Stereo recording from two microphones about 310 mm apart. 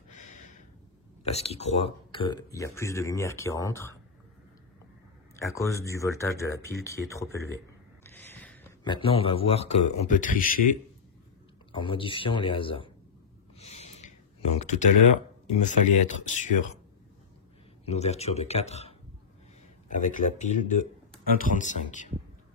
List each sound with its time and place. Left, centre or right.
1.2 s speech: centre
5.3 s speech: centre
8.0 s a sound: centre
8.9 s speech: centre
11.7 s speech: centre
13.6 s a sound: left
15.4 s speech: left
17.8 s speech: left